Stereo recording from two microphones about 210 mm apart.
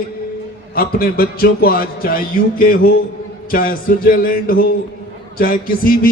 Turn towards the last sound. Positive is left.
turn(degrees=45)  # may be behind; listen again after turning